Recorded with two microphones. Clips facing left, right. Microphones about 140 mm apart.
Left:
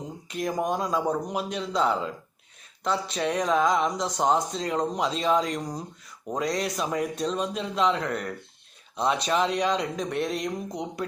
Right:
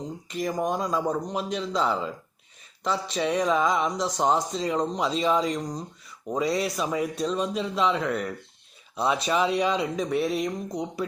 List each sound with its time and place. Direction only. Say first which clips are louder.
0.3 s speech: even; centre (ahead or behind)